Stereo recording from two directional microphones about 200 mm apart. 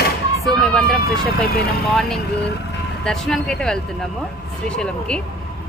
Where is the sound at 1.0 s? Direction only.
50° left (ahead or behind).